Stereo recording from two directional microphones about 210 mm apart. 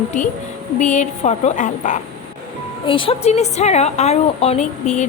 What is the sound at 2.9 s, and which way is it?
A woman's voice, 25° left (ahead or behind).